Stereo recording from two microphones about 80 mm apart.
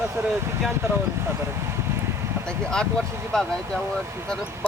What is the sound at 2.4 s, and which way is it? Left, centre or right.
Speech, centre.